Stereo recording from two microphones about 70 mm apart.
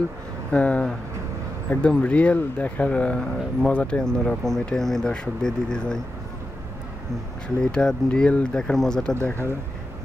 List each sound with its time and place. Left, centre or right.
0.5 s speech: centre
7.4 s speech: centre